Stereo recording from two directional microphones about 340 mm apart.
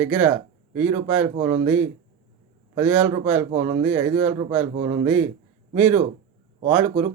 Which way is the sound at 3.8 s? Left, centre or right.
Centre.